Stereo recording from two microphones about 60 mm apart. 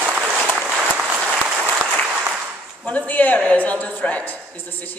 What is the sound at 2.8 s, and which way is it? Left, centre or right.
A man's voice, left.